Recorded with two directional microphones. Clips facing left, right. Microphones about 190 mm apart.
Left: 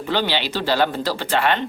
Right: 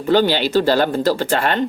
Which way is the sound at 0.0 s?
45° right (ahead or behind).